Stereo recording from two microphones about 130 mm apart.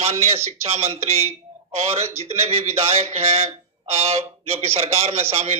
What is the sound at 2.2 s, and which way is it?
Speech, 50° right (ahead or behind).